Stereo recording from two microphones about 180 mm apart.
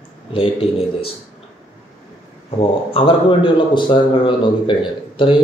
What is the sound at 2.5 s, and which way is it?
A man's voice, 30° left (ahead or behind).